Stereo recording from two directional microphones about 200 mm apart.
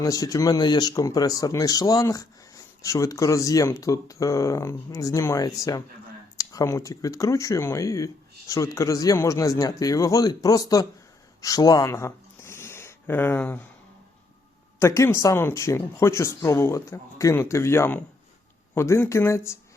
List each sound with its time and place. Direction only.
0.0 s speech: 15° left (ahead or behind)
11.4 s a sound: 20° left (ahead or behind)
14.8 s speech: 15° left (ahead or behind)